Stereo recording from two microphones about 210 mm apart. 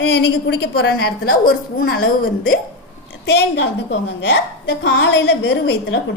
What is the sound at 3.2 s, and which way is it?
A woman's voice, 55° left (ahead or behind).